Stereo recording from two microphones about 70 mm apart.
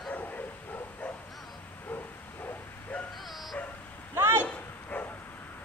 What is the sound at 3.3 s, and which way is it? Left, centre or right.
Dog, centre.